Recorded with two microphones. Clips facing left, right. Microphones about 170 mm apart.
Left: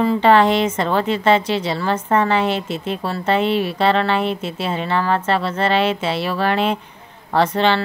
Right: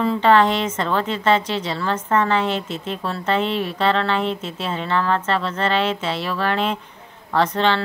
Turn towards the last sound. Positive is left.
turn(degrees=15)  # may be behind; listen again after turning